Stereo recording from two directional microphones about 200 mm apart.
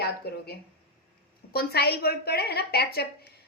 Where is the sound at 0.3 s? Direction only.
55° left (ahead or behind).